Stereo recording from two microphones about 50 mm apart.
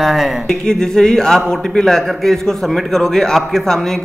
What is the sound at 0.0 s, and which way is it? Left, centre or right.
Speech, centre.